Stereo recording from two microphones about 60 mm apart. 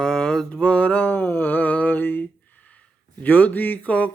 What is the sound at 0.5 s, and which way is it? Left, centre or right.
Mantra, centre.